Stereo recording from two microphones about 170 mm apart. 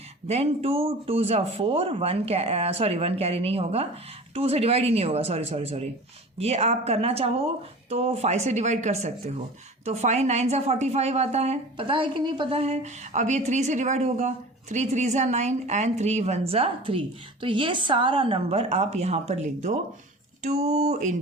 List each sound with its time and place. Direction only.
0.3 s a woman's voice: 35° right (ahead or behind)